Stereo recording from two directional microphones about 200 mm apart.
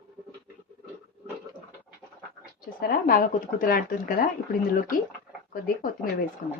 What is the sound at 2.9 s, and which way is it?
A woman's voice, 45° left (ahead or behind).